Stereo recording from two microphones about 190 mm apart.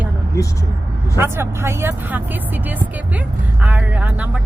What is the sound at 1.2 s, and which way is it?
Speech, 10° right (ahead or behind).